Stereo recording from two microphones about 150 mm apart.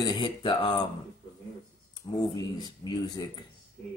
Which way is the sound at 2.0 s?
25° left (ahead or behind).